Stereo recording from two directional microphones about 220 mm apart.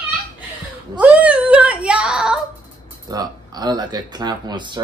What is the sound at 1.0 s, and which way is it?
Whimper, 5° right (ahead or behind).